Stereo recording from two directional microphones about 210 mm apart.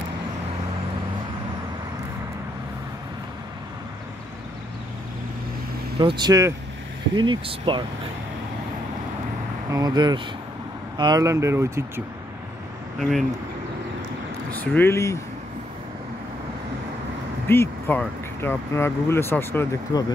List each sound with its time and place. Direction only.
5.9 s speech: 20° right (ahead or behind)
9.7 s speech: 20° right (ahead or behind)
14.5 s speech: 10° left (ahead or behind)
17.5 s speech: 10° left (ahead or behind)